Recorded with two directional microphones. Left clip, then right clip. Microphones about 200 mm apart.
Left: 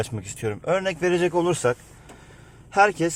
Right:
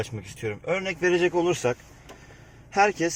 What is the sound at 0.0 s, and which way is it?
Speech, 25° left (ahead or behind).